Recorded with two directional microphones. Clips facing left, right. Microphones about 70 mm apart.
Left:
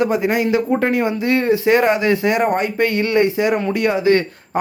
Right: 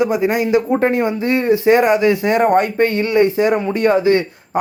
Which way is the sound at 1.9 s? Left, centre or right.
Left.